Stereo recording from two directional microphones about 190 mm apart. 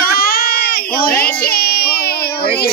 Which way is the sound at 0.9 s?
50° left (ahead or behind).